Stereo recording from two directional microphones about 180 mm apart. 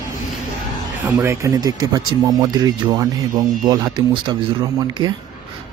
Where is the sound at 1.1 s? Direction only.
15° right (ahead or behind).